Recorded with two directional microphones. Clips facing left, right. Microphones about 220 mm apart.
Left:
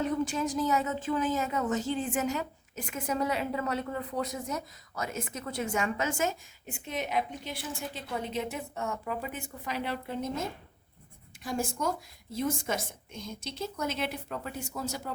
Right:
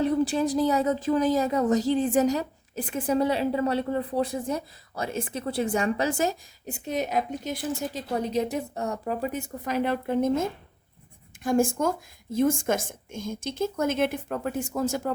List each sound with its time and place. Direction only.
0.0 s speech: 35° right (ahead or behind); by 15.1 s 50° right (ahead or behind)